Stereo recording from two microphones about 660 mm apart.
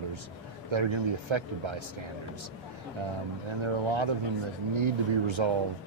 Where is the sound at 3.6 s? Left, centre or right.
Right.